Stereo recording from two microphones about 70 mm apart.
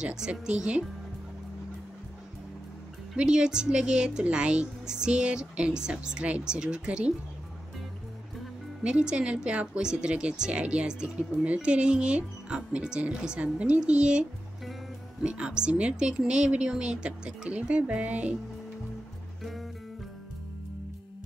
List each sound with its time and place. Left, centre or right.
0.0 s speech: centre
3.2 s speech: centre
8.8 s speech: centre
15.2 s speech: centre